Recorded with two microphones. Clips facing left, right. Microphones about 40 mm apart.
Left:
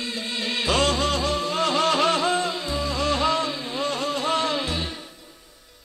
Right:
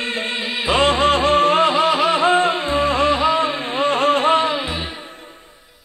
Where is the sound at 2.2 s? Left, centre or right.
Right.